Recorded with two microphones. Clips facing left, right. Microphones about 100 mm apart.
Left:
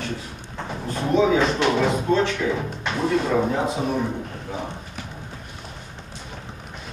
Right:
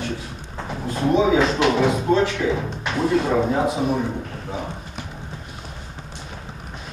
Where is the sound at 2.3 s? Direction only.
20° right (ahead or behind).